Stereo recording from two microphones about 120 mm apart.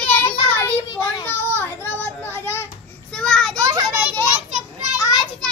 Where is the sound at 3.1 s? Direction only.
5° left (ahead or behind).